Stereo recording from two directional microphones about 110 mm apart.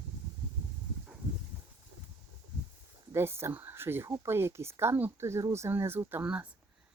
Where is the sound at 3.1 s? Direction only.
20° right (ahead or behind).